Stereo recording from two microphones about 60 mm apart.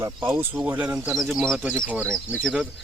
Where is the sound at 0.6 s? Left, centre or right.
Right.